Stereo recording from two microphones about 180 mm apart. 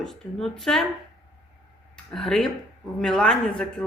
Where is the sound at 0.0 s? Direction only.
Centre (ahead or behind).